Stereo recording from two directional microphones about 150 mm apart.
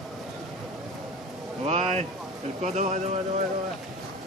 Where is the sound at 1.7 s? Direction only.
45° right (ahead or behind).